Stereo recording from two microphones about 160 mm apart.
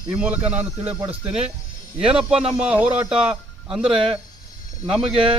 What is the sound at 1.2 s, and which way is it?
Speech, 40° right (ahead or behind).